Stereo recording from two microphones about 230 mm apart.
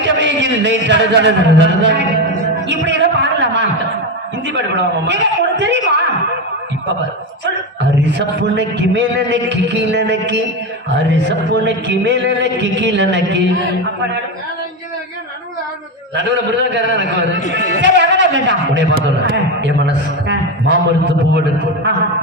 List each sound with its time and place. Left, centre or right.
0.2 s a man's voice: right
2.6 s a sound: right
5.0 s a man's voice: right
7.4 s a man's voice: right
16.7 s a man's voice: right